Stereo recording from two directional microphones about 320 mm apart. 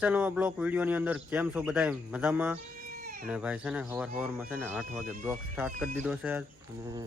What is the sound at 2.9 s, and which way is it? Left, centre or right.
Baby cry, right.